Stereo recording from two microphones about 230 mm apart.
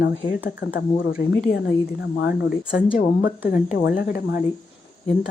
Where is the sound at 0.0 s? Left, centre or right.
Left.